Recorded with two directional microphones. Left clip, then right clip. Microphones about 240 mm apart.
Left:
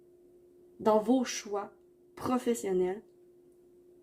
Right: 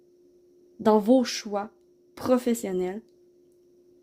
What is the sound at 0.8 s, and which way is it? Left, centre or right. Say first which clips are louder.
Speech: right 6 dB; right.